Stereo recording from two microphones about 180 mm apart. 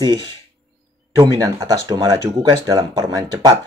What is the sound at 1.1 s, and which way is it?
Speech, 20° right (ahead or behind).